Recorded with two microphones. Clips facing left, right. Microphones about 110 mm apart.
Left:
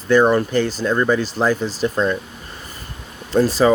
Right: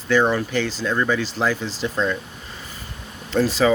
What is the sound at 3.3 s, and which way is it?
Speech, 40° left (ahead or behind).